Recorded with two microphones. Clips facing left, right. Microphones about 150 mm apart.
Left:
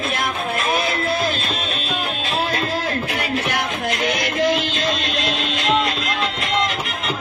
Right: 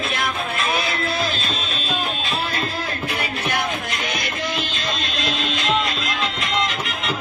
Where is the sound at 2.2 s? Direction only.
75° left (ahead or behind).